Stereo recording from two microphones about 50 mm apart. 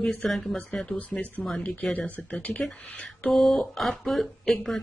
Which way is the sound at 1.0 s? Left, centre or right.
Left.